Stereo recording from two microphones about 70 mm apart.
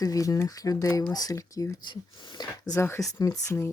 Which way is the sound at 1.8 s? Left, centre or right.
Left.